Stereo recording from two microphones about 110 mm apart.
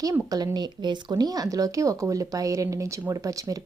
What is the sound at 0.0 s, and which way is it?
A woman's voice, 35° right (ahead or behind).